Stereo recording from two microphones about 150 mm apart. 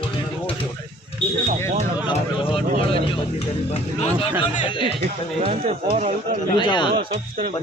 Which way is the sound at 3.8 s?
35° left (ahead or behind).